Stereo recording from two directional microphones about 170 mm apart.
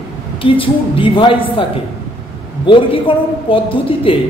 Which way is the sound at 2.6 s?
30° left (ahead or behind).